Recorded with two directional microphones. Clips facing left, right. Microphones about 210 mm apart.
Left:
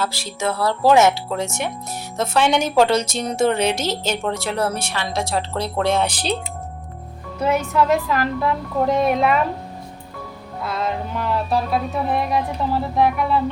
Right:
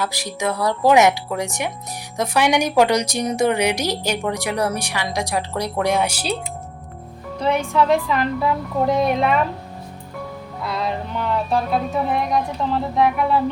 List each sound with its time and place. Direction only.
0.0 s a woman's voice: 15° right (ahead or behind)
7.3 s music: 5° left (ahead or behind)
10.6 s music: centre (ahead or behind)